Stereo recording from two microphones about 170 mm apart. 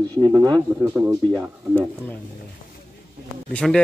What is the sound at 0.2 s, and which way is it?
Speech, 20° right (ahead or behind).